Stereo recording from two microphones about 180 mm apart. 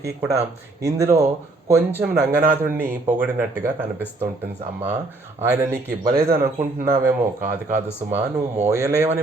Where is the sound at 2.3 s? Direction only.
10° right (ahead or behind).